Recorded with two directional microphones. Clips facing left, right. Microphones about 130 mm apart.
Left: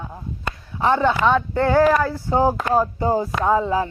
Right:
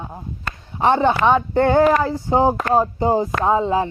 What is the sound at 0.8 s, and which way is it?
Speech, 25° right (ahead or behind).